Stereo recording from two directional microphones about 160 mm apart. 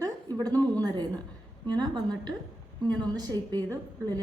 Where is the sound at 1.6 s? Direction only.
25° right (ahead or behind).